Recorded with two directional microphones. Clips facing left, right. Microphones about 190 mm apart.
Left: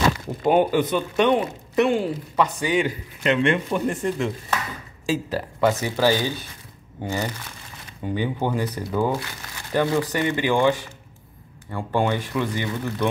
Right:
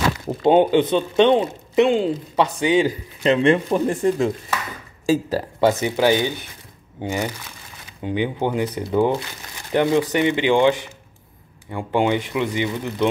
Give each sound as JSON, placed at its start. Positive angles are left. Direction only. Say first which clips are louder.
{"t": 0.4, "sound": "speech", "louder": "right 4 dB", "side_deg": -25}
{"t": 5.7, "sound": "speech", "louder": "right 3 dB", "side_deg": -20}